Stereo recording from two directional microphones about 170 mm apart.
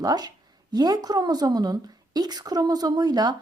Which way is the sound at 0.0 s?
25° right (ahead or behind).